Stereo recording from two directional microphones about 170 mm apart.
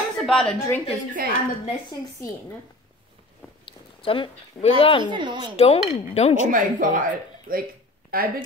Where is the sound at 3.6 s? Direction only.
30° left (ahead or behind).